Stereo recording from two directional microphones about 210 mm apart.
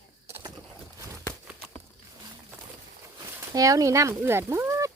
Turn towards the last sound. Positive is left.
turn(degrees=-15)  # may be behind; listen again after turning